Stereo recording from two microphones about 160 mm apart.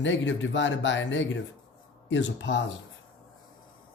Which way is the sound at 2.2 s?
90° left.